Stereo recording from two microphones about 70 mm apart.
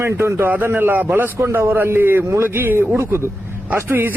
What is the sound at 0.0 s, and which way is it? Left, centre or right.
Speech, right.